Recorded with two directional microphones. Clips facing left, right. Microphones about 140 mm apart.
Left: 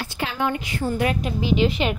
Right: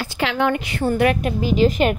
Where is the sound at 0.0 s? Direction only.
90° right; by 1.3 s 65° right (ahead or behind).